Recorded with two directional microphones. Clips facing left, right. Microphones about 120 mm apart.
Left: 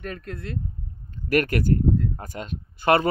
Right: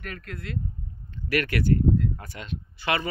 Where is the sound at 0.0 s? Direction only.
30° left (ahead or behind).